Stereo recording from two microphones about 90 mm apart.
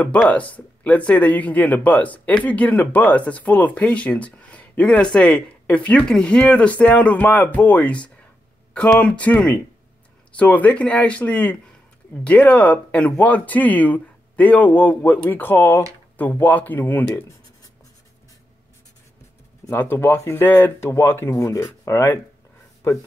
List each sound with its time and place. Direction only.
0.0 s speech: 15° left (ahead or behind)
19.7 s speech: 25° left (ahead or behind)